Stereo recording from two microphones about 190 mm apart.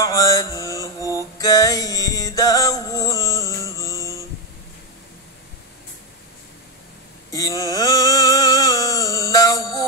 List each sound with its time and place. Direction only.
0.0 s mantra: 20° left (ahead or behind)
1.1 s music: 20° left (ahead or behind)
7.3 s a sound: 20° left (ahead or behind)